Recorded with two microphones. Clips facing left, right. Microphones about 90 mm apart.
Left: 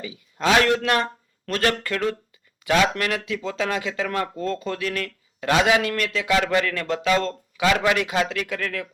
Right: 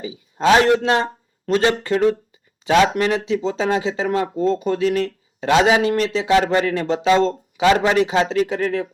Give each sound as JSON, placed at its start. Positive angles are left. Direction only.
{"t": 0.0, "sound": "a man's voice", "side_deg": -25}